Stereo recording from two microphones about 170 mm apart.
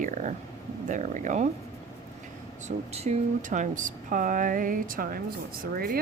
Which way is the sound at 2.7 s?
40° right (ahead or behind).